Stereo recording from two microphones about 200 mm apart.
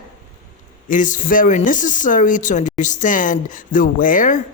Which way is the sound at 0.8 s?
40° left (ahead or behind).